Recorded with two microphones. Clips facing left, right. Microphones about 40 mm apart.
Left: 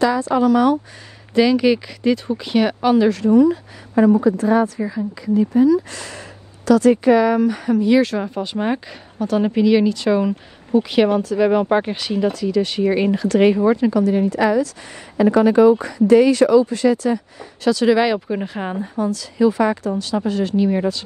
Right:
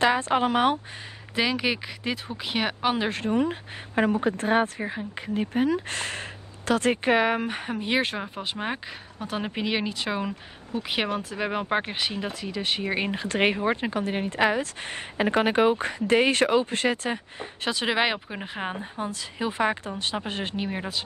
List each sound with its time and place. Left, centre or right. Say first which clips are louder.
0.0 s speech: left 5 dB; right
1.3 s a woman's voice: left 11 dB; centre
3.1 s speech: left 11 dB; right
8.4 s speech: left 9 dB; centre
9.2 s a woman's voice: left 13 dB; right
18.3 s speech: left 8 dB; centre
18.9 s speech: left 12 dB; right